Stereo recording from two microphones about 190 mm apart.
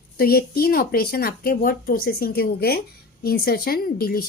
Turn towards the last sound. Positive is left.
turn(degrees=50)  # may be behind; listen again after turning